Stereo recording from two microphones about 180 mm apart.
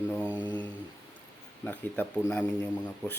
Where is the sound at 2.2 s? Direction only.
10° left (ahead or behind).